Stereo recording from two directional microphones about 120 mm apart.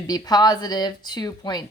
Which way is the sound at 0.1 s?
35° left (ahead or behind).